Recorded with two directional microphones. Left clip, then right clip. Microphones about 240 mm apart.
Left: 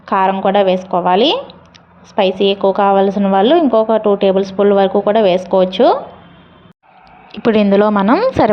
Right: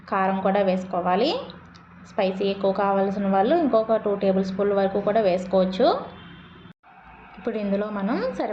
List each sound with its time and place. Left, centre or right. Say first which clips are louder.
0.0 s a woman's voice: left 10 dB; left
7.3 s a woman's voice: left 15 dB; left